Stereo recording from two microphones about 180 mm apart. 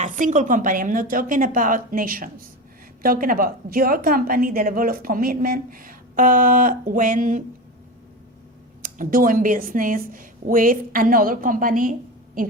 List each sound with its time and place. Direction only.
0.0 s a woman's voice: 45° right (ahead or behind)
8.8 s a woman's voice: 50° right (ahead or behind)